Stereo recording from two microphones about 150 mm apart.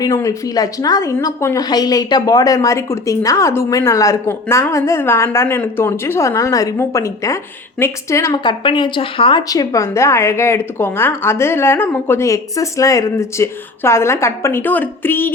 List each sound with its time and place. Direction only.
0.0 s a woman's voice: 20° left (ahead or behind)
8.4 s a woman's voice: 30° left (ahead or behind); by 15.3 s 15° left (ahead or behind)